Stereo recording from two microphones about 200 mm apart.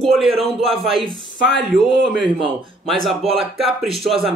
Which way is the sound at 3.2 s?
30° right (ahead or behind).